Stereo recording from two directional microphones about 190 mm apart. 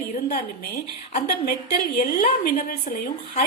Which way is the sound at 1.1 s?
40° left (ahead or behind).